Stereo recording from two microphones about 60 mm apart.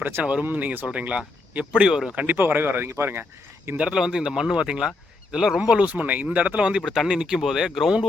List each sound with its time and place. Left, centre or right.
0.2 s speech: centre
0.4 s speech: right
3.8 s speech: centre